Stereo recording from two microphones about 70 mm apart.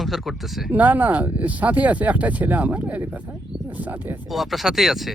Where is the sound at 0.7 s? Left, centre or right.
Right.